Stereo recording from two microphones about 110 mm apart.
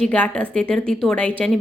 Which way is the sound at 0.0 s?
10° left (ahead or behind).